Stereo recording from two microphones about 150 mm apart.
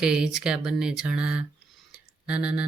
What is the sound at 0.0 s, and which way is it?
Speech, 5° right (ahead or behind).